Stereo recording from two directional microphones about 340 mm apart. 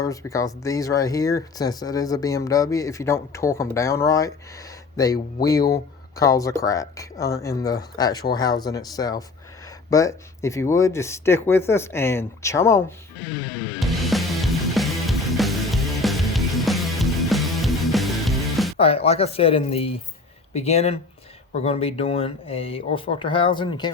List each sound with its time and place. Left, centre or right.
0.0 s speech: centre
13.7 s music: centre
18.8 s speech: centre